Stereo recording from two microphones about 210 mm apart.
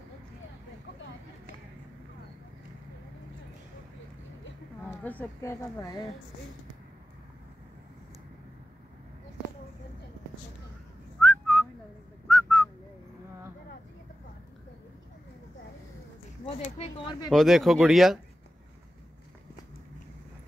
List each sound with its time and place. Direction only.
5.0 s a woman's voice: 10° left (ahead or behind)
11.1 s whistling: 5° left (ahead or behind)
16.4 s a sound: 30° left (ahead or behind)
17.3 s speech: centre (ahead or behind)